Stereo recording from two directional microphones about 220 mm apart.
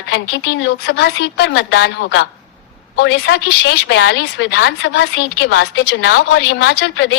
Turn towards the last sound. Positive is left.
turn(degrees=55)  # may be behind; listen again after turning